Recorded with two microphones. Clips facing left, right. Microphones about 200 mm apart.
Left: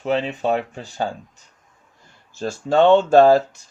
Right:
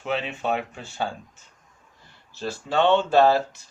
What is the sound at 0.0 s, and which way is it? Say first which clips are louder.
Speech: left 6 dB; 40° left (ahead or behind).